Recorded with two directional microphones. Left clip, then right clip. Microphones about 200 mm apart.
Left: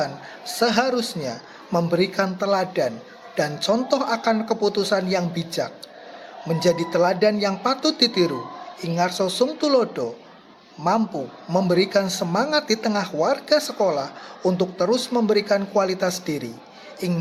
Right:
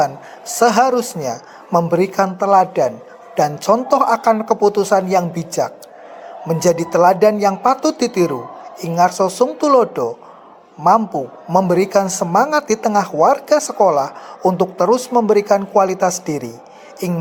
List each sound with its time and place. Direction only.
0.0 s a man's voice: 20° right (ahead or behind)